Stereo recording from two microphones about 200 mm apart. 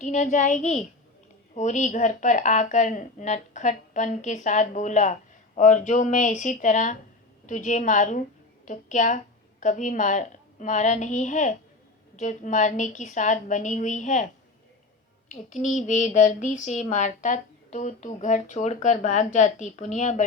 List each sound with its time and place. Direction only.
0.0 s a woman's voice: 40° left (ahead or behind)
15.3 s speech: 40° left (ahead or behind)